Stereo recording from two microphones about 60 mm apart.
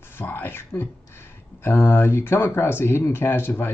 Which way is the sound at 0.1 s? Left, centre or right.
Left.